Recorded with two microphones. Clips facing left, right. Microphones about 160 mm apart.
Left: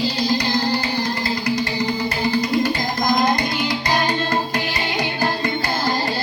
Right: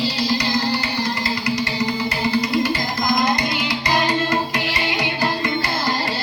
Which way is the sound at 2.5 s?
50° left (ahead or behind).